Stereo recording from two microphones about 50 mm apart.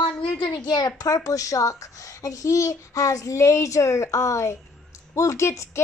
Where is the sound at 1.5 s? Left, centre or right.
Left.